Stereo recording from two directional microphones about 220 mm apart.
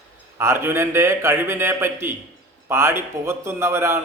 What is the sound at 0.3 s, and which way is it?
Speech, 10° right (ahead or behind).